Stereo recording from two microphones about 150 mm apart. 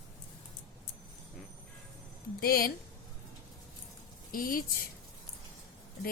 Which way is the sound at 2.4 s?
90° left.